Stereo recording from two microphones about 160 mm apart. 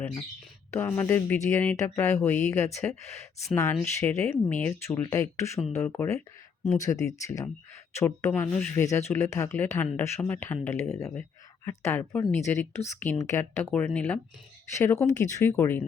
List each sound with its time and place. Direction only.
0.7 s speech: 10° left (ahead or behind)